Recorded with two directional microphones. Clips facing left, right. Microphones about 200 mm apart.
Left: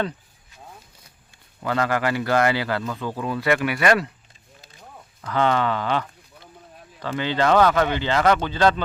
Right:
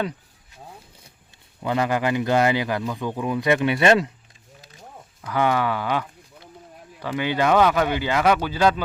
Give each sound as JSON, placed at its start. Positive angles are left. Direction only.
{"t": 1.6, "sound": "a man's voice", "side_deg": -15}
{"t": 5.2, "sound": "a man's voice", "side_deg": -10}